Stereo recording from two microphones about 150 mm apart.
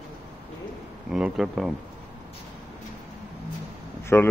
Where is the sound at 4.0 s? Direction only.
15° left (ahead or behind).